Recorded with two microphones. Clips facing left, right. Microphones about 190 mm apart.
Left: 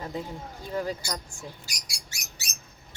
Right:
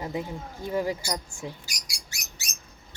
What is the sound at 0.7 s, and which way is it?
Speech, 15° right (ahead or behind).